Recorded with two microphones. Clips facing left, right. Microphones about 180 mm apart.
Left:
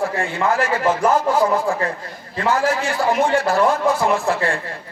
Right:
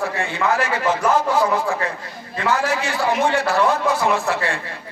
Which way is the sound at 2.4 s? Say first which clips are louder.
Left 2 dB; 50° left (ahead or behind).